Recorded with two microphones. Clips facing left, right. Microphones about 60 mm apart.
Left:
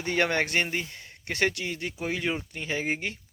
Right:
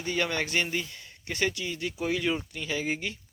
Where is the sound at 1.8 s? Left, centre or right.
Left.